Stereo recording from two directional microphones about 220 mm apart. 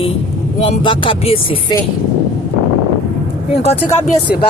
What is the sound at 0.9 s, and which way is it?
Speech, 25° left (ahead or behind).